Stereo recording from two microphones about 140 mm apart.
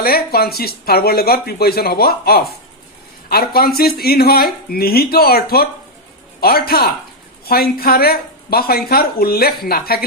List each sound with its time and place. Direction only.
0.0 s speech: 90° left